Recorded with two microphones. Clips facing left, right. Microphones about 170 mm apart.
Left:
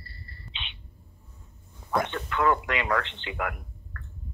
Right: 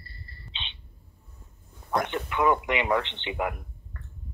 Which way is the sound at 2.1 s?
15° right (ahead or behind).